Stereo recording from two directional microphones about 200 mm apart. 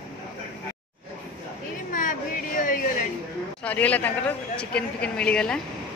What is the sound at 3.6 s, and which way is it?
A man's voice, 5° left (ahead or behind).